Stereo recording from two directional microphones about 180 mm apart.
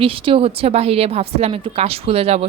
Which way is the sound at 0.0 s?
30° right (ahead or behind).